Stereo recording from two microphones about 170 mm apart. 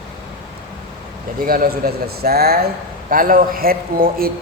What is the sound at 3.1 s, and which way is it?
A man's voice, 55° right (ahead or behind).